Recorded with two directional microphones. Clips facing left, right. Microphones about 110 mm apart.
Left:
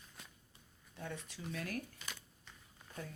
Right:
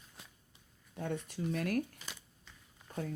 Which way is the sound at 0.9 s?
50° right (ahead or behind).